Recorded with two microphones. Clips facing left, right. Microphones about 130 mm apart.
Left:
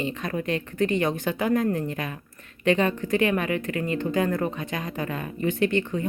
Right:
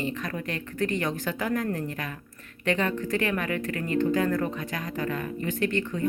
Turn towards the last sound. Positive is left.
turn(degrees=20)  # may be behind; listen again after turning